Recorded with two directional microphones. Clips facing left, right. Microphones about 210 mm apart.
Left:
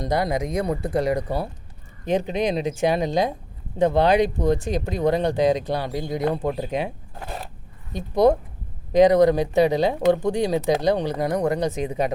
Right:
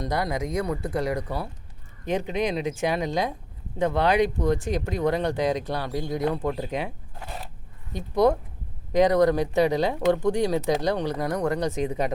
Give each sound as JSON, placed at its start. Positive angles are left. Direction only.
{"t": 0.0, "sound": "speech", "side_deg": 25}
{"t": 7.2, "sound": "a sound", "side_deg": 65}
{"t": 8.1, "sound": "speech", "side_deg": 15}